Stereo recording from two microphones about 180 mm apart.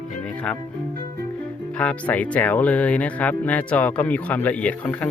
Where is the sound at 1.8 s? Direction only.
5° left (ahead or behind).